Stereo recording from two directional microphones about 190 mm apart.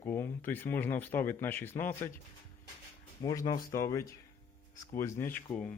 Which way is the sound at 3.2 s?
20° left (ahead or behind).